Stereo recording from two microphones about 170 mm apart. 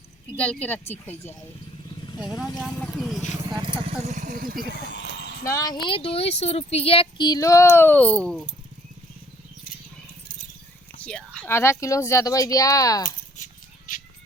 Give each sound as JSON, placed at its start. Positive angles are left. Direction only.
{"t": 0.3, "sound": "speech", "side_deg": 10}
{"t": 2.6, "sound": "speech", "side_deg": 0}
{"t": 3.8, "sound": "speech", "side_deg": -45}
{"t": 5.5, "sound": "speech", "side_deg": 20}
{"t": 11.2, "sound": "a sound", "side_deg": -5}
{"t": 11.4, "sound": "speech", "side_deg": 15}
{"t": 13.3, "sound": "a sound", "side_deg": 50}